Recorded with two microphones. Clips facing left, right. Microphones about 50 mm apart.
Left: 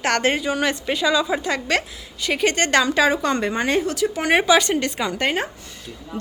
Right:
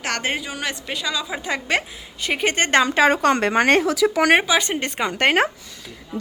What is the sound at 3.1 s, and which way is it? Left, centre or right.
Speech, right.